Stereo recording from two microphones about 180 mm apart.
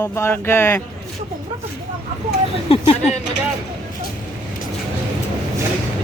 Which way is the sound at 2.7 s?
35° left (ahead or behind).